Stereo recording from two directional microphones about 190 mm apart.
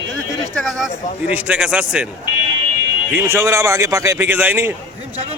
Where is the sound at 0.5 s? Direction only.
Centre (ahead or behind).